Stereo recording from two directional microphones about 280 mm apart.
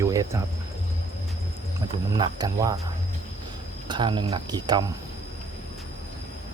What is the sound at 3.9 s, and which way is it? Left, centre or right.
Speech, centre.